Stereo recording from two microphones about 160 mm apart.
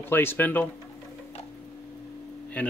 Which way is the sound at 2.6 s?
10° left (ahead or behind).